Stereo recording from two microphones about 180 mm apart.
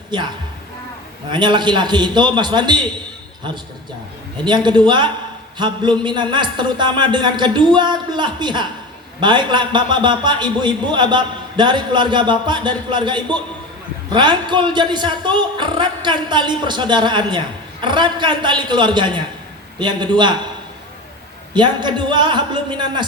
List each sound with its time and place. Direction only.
0.1 s speech: 25° right (ahead or behind)
1.3 s speech: 25° right (ahead or behind)
4.4 s speech: 25° right (ahead or behind)
21.5 s speech: 25° right (ahead or behind)